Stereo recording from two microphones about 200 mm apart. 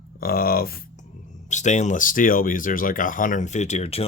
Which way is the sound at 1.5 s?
35° left (ahead or behind).